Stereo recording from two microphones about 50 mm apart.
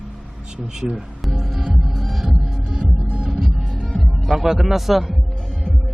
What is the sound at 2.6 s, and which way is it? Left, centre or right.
Music, centre.